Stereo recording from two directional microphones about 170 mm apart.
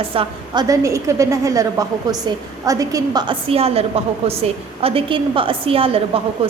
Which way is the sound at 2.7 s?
20° right (ahead or behind).